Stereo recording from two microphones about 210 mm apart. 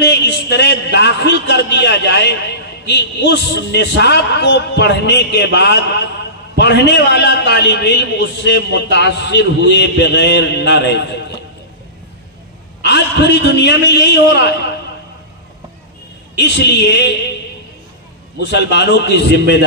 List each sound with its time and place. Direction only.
0.0 s a sound: 55° left (ahead or behind)
0.9 s a man's voice: 55° left (ahead or behind)
12.8 s a man's voice: 55° left (ahead or behind)
16.3 s a woman's voice: 55° left (ahead or behind)
18.4 s a man's voice: 55° left (ahead or behind)